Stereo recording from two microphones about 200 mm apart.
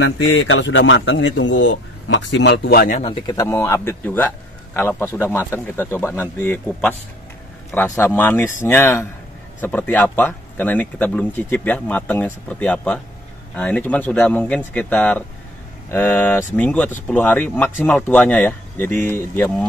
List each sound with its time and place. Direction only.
0.0 s a man's voice: 80° left; by 3.0 s 50° left (ahead or behind)
3.0 s speech: 25° left (ahead or behind)